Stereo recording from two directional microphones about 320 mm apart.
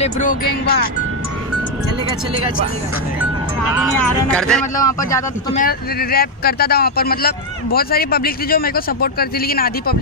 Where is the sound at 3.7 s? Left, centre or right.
Centre.